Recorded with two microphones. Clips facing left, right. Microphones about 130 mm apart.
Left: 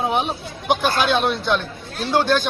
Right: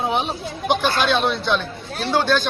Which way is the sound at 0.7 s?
50° left (ahead or behind).